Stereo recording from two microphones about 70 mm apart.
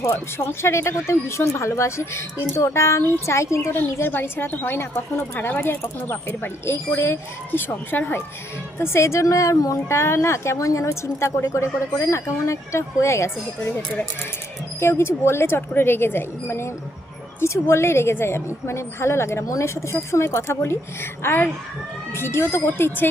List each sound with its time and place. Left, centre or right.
0.3 s a woman's voice: left
3.9 s a woman's voice: left
8.8 s a woman's voice: left
14.8 s a woman's voice: left